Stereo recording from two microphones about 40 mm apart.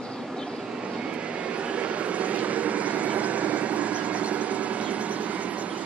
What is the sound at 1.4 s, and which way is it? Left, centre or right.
Vehicle, right.